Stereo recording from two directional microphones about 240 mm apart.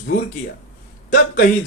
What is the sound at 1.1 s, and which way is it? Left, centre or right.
Speech, left.